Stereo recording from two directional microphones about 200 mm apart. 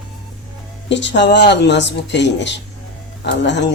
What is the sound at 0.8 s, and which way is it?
Speech, 65° left (ahead or behind).